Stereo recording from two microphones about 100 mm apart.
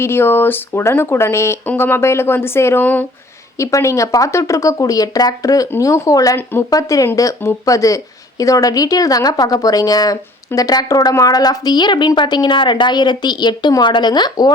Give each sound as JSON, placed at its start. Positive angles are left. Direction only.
{"t": 0.0, "sound": "speech", "side_deg": 25}
{"t": 3.6, "sound": "speech", "side_deg": 30}
{"t": 6.3, "sound": "speech", "side_deg": 20}
{"t": 6.7, "sound": "a woman's voice", "side_deg": 35}